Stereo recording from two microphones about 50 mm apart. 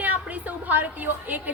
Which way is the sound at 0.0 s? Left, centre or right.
Right.